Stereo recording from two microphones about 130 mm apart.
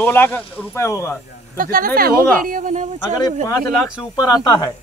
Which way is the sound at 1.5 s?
90° right.